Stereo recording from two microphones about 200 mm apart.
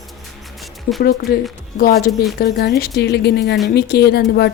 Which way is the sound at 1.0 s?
50° left (ahead or behind).